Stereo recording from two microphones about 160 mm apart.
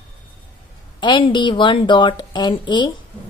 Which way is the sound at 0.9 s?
30° left (ahead or behind).